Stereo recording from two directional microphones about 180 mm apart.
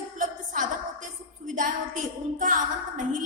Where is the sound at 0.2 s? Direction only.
45° right (ahead or behind).